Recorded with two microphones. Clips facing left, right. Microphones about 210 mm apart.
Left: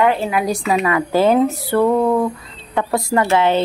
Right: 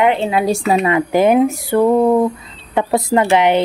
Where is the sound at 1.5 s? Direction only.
15° right (ahead or behind).